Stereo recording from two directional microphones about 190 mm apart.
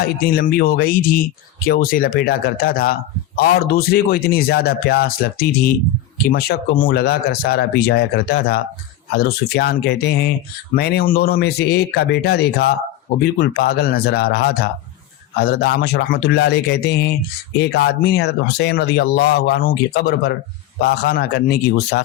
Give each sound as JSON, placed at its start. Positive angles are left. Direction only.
{"t": 0.0, "sound": "speech", "side_deg": 55}